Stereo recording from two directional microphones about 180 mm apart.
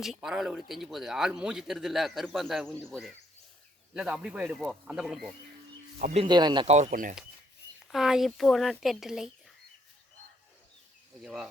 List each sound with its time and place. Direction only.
0.0 s speech: centre (ahead or behind)
6.0 s speech: 45° right (ahead or behind)
6.2 s speech: 25° right (ahead or behind)
6.7 s speech: 40° right (ahead or behind)
7.9 s speech: centre (ahead or behind)
11.2 s speech: 5° right (ahead or behind)